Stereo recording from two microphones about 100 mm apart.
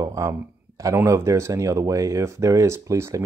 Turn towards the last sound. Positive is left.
turn(degrees=-30)  # may be behind; listen again after turning